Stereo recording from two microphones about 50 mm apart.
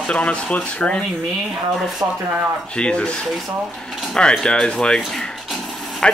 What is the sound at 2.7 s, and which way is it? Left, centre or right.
Speech, left.